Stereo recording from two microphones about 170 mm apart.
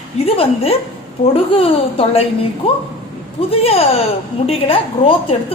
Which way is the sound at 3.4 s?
35° left (ahead or behind).